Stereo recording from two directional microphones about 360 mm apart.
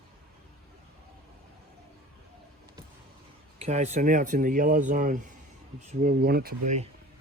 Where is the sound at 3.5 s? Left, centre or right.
Centre.